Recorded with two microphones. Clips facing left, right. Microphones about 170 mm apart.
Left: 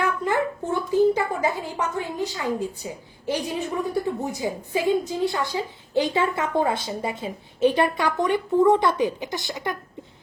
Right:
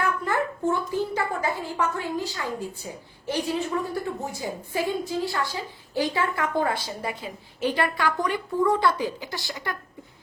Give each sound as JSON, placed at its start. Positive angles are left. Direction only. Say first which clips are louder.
{"t": 0.0, "sound": "a child's voice", "louder": "left 2 dB", "side_deg": 20}